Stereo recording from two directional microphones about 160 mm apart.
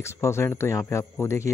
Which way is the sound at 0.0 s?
15° left (ahead or behind).